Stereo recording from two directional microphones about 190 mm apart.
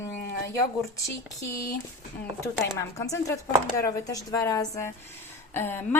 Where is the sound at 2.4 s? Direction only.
15° left (ahead or behind).